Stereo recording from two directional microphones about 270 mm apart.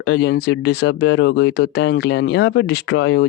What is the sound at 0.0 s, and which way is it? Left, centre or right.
Speech, left.